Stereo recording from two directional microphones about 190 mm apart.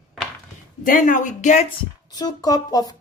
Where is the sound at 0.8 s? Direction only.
45° left (ahead or behind).